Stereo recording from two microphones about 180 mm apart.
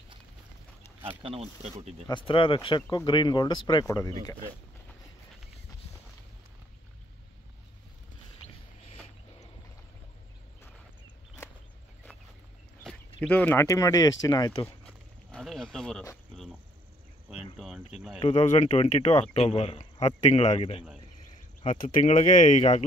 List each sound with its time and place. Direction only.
1.2 s speech: 35° right (ahead or behind)
2.0 s speech: 30° left (ahead or behind)
8.4 s a sound: 35° left (ahead or behind)
13.2 s speech: 10° left (ahead or behind)
14.9 s a sound: centre (ahead or behind)
17.6 s speech: 5° right (ahead or behind)
18.2 s speech: 35° left (ahead or behind)